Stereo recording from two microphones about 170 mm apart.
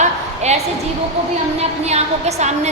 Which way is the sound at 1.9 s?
40° right (ahead or behind).